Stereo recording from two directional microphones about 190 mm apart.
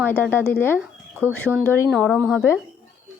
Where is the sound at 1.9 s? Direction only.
Centre (ahead or behind).